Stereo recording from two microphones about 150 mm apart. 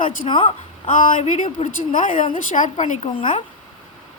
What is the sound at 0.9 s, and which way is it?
Speech, 60° left (ahead or behind).